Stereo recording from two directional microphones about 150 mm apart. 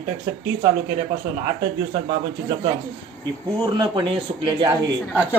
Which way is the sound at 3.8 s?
30° right (ahead or behind).